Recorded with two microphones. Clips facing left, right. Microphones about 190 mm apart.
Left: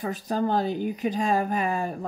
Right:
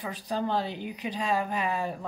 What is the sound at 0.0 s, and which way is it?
Speech, 45° left (ahead or behind).